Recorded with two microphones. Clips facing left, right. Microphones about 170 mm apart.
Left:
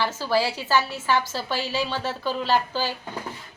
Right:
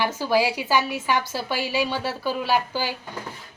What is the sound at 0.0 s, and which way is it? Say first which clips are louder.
A woman's voice: right 2 dB; 15° right (ahead or behind).